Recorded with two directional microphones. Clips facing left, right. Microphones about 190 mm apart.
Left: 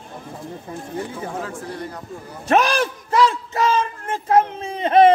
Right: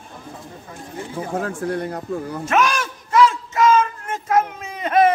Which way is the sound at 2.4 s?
35° left (ahead or behind).